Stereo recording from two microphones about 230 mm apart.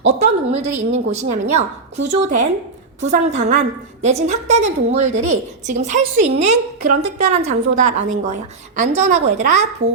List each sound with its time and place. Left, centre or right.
0.0 s a woman's voice: right